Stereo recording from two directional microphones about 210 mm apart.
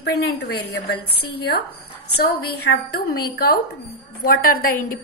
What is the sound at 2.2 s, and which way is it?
A woman's voice, 50° left (ahead or behind).